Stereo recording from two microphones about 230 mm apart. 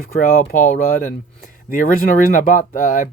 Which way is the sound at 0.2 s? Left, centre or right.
Left.